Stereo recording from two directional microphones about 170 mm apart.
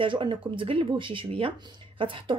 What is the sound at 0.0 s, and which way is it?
Speech, 30° right (ahead or behind).